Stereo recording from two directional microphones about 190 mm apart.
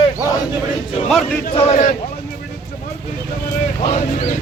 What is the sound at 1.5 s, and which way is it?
Speech, 35° left (ahead or behind).